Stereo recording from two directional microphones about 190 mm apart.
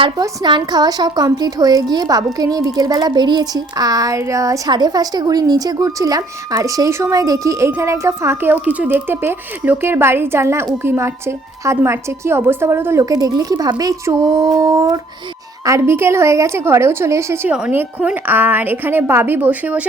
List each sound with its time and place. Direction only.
0.0 s a woman's voice: 25° right (ahead or behind); by 19.9 s 5° right (ahead or behind)